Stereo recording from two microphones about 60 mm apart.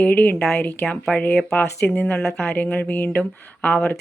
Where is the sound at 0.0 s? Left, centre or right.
Left.